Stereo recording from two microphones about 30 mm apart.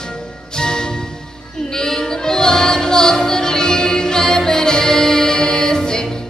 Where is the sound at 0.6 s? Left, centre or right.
Left.